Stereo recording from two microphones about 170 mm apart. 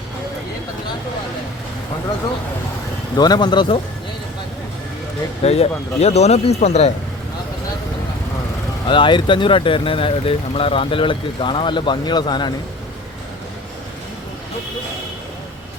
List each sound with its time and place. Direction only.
3.2 s speech: 25° left (ahead or behind)
5.4 s speech: 40° left (ahead or behind)
8.9 s speech: 30° left (ahead or behind)